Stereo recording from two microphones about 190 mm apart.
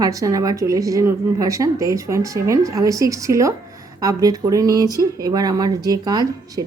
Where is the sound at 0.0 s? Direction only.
20° right (ahead or behind).